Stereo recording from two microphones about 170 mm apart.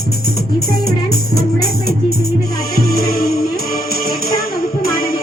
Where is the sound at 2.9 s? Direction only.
65° left (ahead or behind).